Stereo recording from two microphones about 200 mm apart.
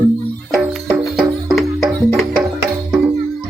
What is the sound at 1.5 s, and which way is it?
Music, centre (ahead or behind).